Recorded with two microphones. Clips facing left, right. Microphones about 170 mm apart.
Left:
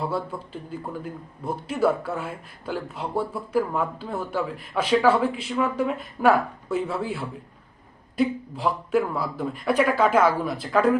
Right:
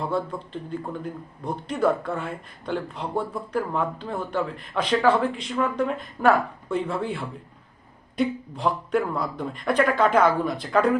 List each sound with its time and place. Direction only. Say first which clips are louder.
0.0 s a man's voice: right 1 dB; 5° left (ahead or behind)